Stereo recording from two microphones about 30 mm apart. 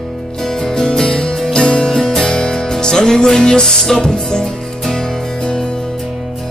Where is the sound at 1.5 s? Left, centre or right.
Left.